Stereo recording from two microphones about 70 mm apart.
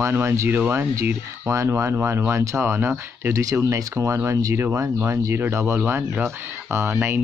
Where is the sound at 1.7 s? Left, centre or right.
Right.